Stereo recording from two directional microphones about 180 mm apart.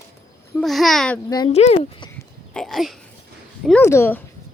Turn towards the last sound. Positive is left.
turn(degrees=10)  # may be behind; listen again after turning